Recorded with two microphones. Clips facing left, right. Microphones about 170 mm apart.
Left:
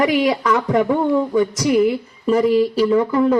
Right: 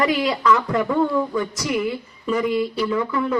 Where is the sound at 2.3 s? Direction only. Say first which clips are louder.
Left 6 dB; 35° left (ahead or behind).